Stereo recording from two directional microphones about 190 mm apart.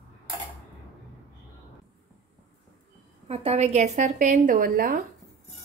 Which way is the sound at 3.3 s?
35° right (ahead or behind).